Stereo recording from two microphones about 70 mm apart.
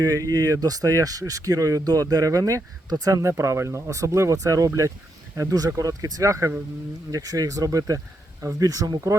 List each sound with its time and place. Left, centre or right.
0.0 s speech: right